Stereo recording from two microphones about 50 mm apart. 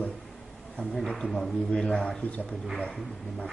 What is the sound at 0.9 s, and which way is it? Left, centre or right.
A man's voice, centre.